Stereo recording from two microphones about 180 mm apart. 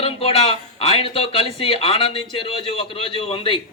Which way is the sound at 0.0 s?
30° left (ahead or behind).